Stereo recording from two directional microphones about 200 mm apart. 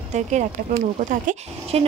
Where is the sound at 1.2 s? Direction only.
30° right (ahead or behind).